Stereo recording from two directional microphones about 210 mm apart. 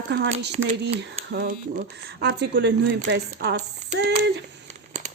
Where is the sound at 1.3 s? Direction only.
45° right (ahead or behind).